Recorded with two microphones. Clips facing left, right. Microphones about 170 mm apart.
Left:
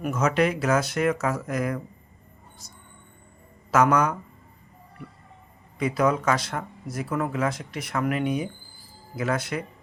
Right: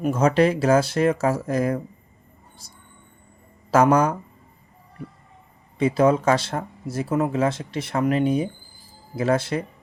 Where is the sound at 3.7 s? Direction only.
30° right (ahead or behind).